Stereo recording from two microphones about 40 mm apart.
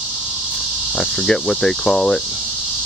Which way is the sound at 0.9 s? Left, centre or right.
Centre.